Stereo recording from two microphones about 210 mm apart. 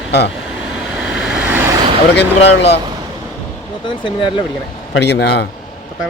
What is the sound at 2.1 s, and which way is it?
Speech, 55° left (ahead or behind).